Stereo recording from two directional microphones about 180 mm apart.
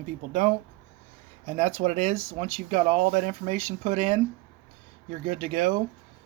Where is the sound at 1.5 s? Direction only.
40° right (ahead or behind).